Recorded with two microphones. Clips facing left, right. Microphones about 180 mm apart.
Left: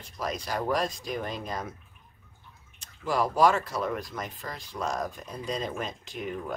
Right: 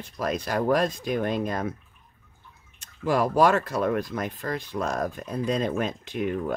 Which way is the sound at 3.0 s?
55° right (ahead or behind).